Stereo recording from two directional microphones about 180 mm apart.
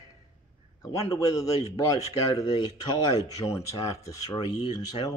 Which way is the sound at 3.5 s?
20° left (ahead or behind).